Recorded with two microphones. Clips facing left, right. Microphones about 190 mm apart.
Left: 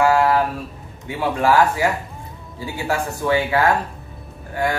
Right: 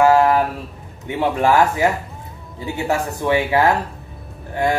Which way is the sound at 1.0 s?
20° right (ahead or behind).